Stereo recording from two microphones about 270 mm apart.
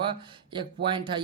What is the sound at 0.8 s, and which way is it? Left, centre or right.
Speech, centre.